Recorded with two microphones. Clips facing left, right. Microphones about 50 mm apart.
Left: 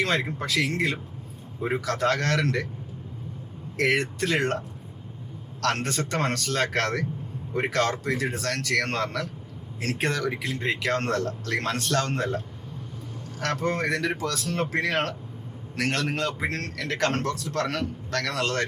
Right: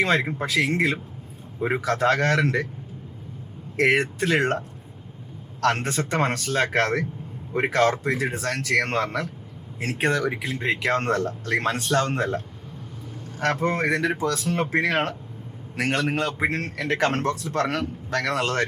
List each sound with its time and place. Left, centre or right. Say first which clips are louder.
0.0 s speech: right 4 dB; centre
3.8 s speech: right 3 dB; right
5.5 s speech: right 3 dB; centre
10.6 s speech: right 3 dB; right
13.6 s speech: right 1 dB; right